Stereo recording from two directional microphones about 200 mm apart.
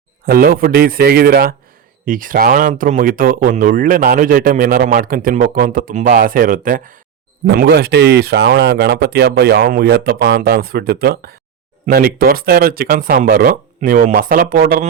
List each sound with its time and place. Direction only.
0.3 s speech: 50° right (ahead or behind)
7.4 s speech: 55° right (ahead or behind)